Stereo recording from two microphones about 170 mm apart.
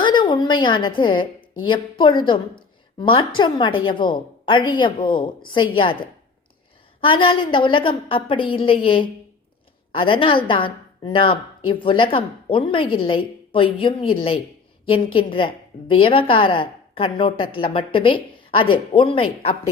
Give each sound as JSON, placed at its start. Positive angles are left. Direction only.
{"t": 0.0, "sound": "a woman's voice", "side_deg": 25}
{"t": 7.0, "sound": "a woman's voice", "side_deg": 30}